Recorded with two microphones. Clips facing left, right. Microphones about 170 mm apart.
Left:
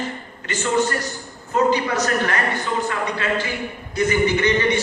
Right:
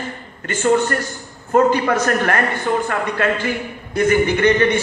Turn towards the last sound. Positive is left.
turn(degrees=-55)  # may be behind; listen again after turning